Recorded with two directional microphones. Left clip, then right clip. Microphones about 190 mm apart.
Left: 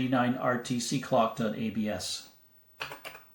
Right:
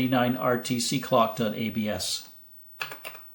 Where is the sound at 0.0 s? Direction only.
35° right (ahead or behind).